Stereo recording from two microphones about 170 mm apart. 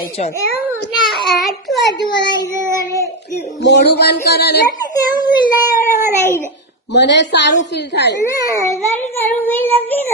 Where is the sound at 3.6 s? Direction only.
80° left.